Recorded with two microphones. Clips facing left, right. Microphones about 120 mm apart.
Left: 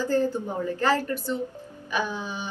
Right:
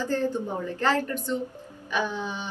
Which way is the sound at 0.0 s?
10° left (ahead or behind).